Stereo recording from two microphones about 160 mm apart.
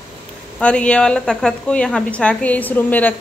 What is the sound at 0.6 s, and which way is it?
A woman's voice, 5° left (ahead or behind).